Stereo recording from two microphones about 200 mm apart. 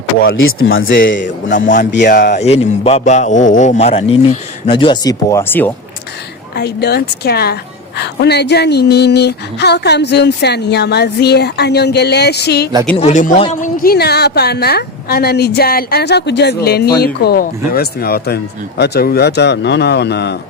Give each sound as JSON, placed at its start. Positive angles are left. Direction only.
{"t": 0.3, "sound": "speech", "side_deg": 80}
{"t": 1.2, "sound": "a man's voice", "side_deg": 40}
{"t": 2.4, "sound": "a man's voice", "side_deg": 30}
{"t": 6.6, "sound": "a woman's voice", "side_deg": 55}
{"t": 13.0, "sound": "a woman's voice", "side_deg": 35}